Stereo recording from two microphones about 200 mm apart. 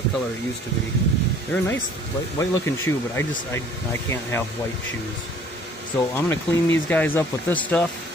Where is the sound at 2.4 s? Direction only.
10° left (ahead or behind).